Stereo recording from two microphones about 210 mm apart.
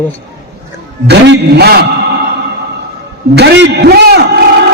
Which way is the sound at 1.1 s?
50° right (ahead or behind).